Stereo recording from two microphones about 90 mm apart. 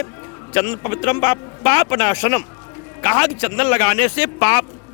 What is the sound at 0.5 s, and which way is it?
A man's voice, 25° left (ahead or behind).